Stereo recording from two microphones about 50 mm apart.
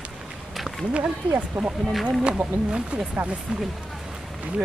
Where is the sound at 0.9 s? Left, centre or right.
Right.